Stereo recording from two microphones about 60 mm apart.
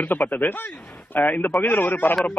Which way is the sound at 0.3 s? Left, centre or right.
Left.